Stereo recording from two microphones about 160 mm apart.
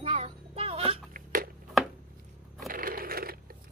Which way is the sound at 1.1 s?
60° right (ahead or behind).